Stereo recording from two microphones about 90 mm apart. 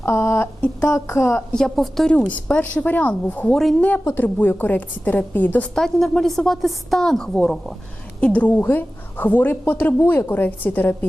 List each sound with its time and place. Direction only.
0.0 s a woman's voice: 25° left (ahead or behind)
1.5 s a woman's voice: 5° left (ahead or behind); by 5.6 s 20° left (ahead or behind)
5.7 s a woman's voice: 5° left (ahead or behind)